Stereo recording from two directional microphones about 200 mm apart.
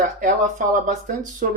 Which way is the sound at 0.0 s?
45° right (ahead or behind).